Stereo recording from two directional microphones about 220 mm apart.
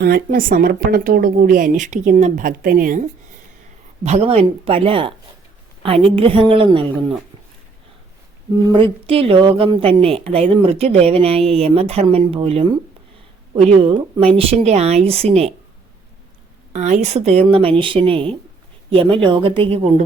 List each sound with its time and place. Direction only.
0.0 s a woman's voice: 45° right (ahead or behind); by 7.2 s 25° right (ahead or behind)
8.7 s a woman's voice: 25° right (ahead or behind)
16.7 s a woman's voice: 30° right (ahead or behind)